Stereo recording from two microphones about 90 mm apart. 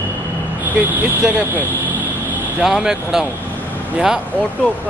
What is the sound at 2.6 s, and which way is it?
Speech, 5° right (ahead or behind).